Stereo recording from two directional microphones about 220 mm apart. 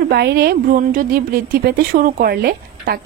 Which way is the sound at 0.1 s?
50° right (ahead or behind).